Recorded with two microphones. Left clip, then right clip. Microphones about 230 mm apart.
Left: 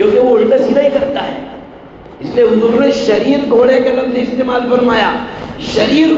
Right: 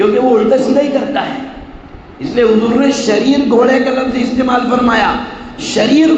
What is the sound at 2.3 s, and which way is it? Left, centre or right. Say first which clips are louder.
A man's voice: left 1 dB; right.